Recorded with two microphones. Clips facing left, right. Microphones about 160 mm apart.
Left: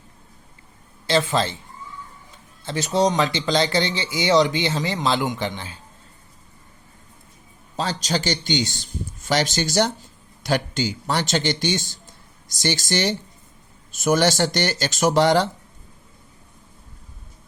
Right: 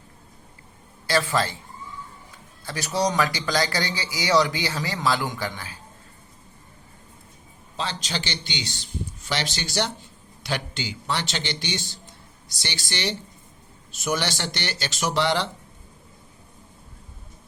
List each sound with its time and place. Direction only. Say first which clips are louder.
1.0 s speech: left 3 dB; 20° left (ahead or behind)
2.6 s speech: left 5 dB; 25° left (ahead or behind)
7.8 s speech: left 6 dB; 40° left (ahead or behind)